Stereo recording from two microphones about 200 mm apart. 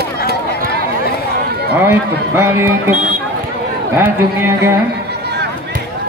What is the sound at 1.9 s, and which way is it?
Speech, 10° right (ahead or behind).